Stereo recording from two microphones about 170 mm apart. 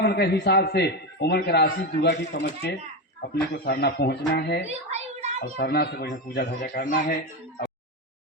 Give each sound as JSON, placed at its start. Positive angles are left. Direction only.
{"t": 0.0, "sound": "a man's voice", "side_deg": 70}
{"t": 4.7, "sound": "a sound", "side_deg": -40}
{"t": 5.5, "sound": "a man's voice", "side_deg": 65}